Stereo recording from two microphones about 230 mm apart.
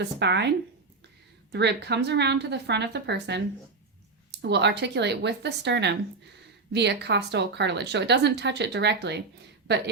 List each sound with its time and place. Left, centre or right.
0.0 s speech: right
1.5 s speech: right